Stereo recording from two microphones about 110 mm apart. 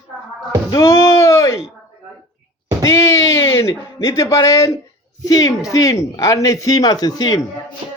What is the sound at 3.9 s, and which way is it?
Speech, 25° left (ahead or behind).